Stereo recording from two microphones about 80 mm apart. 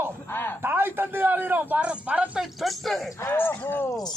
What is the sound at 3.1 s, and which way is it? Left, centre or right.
Speech, left.